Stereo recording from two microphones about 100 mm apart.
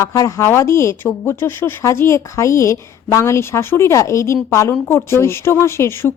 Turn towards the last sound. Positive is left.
turn(degrees=25)  # may be behind; listen again after turning